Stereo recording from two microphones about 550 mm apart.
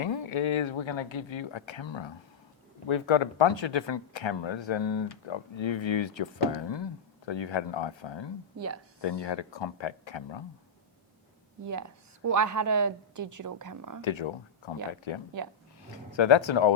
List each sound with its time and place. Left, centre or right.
0.0 s speech: left
11.6 s a woman's voice: right
14.0 s speech: left